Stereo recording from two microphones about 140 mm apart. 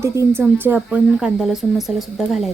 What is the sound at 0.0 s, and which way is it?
A woman's voice, 20° right (ahead or behind).